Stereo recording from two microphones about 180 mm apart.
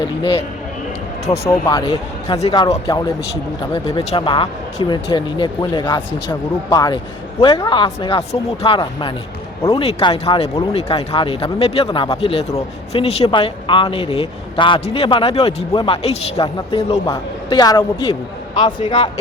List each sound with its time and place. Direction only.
1.3 s a man's voice: 25° left (ahead or behind)
2.6 s speech: 20° left (ahead or behind)
3.7 s a man's voice: 30° left (ahead or behind)
11.9 s a man's voice: 20° left (ahead or behind)
12.1 s a man's voice: 35° left (ahead or behind)